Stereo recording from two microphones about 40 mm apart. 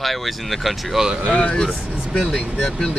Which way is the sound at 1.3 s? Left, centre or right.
Left.